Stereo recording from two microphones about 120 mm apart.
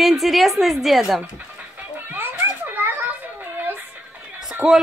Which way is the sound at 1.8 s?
15° right (ahead or behind).